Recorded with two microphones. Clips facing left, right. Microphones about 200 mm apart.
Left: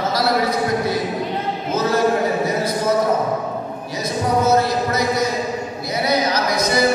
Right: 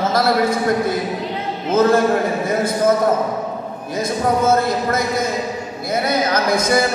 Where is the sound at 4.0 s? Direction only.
50° right (ahead or behind).